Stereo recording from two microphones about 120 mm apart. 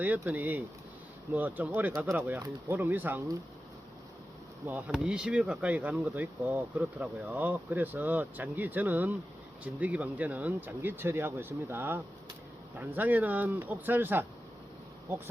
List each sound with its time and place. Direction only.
0.0 s speech: 15° right (ahead or behind)
4.9 s speech: 10° right (ahead or behind)